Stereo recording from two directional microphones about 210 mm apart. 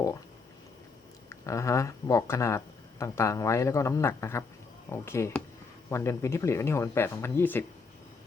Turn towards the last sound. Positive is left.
turn(degrees=10)  # may be behind; listen again after turning